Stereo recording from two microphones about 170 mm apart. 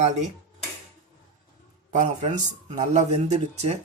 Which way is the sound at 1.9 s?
45° right (ahead or behind).